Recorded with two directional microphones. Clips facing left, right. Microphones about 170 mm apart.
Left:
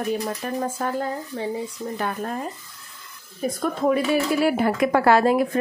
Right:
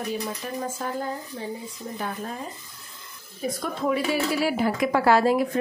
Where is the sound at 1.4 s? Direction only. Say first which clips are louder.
Left 6 dB; 65° left (ahead or behind).